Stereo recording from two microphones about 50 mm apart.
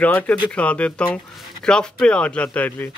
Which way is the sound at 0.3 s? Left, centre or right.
Left.